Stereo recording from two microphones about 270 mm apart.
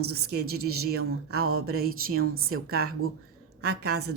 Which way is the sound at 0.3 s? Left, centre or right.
Right.